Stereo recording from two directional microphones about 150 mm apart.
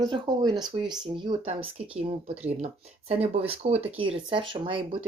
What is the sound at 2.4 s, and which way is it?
Speech, 45° right (ahead or behind).